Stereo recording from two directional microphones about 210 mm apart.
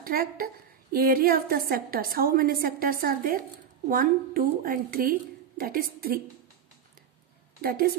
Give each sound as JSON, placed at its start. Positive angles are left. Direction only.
{"t": 0.0, "sound": "a woman's voice", "side_deg": -45}
{"t": 7.6, "sound": "a woman's voice", "side_deg": -45}